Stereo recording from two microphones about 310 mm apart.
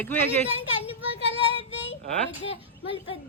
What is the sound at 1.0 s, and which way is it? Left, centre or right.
Child singing, centre.